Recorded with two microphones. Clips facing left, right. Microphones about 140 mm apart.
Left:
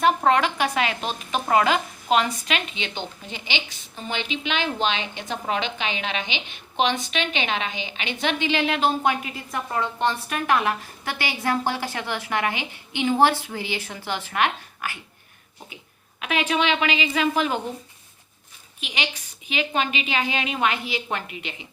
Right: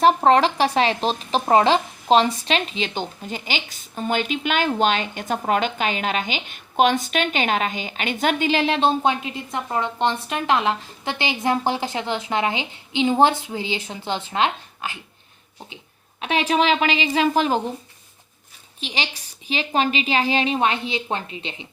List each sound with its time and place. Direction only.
0.0 s a woman's voice: 35° right (ahead or behind)
16.2 s a woman's voice: 35° right (ahead or behind)
18.8 s a woman's voice: 30° right (ahead or behind)